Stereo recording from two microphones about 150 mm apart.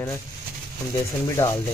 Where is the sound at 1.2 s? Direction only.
20° left (ahead or behind).